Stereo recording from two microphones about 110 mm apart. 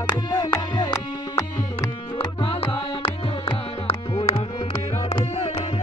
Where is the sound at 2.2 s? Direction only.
55° left (ahead or behind).